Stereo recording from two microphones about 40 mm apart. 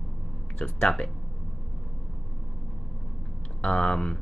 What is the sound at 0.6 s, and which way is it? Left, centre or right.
Speech, centre.